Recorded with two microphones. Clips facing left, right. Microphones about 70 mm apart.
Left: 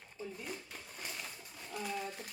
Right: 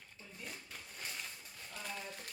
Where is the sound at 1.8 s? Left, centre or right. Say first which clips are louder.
Left 6 dB; centre.